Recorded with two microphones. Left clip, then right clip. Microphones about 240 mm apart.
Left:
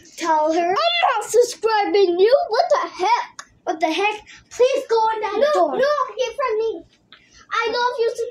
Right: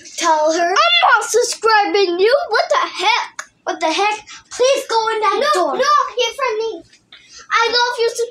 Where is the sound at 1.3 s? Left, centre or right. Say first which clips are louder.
Right 3 dB; centre.